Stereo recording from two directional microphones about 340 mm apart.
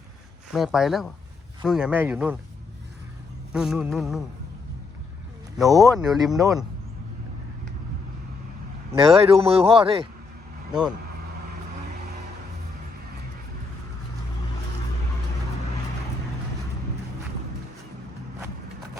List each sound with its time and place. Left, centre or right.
0.5 s speech: centre
3.5 s speech: centre
5.5 s a man's voice: centre
8.9 s a man's voice: centre